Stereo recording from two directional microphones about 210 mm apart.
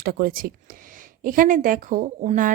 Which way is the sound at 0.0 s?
45° right (ahead or behind).